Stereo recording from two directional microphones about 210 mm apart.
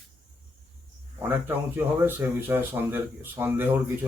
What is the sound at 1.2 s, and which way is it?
Speech, 10° right (ahead or behind).